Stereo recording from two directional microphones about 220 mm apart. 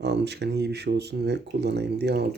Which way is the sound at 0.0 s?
50° right (ahead or behind).